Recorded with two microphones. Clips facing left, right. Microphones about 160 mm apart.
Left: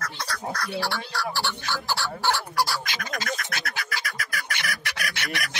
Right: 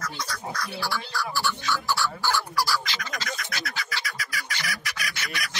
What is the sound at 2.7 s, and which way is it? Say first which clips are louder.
Bird: right 1 dB; 50° left (ahead or behind).